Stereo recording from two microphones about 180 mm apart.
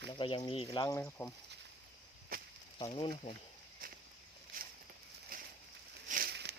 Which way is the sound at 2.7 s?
25° left (ahead or behind).